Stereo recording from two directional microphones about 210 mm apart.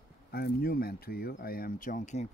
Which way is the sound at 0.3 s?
45° left (ahead or behind).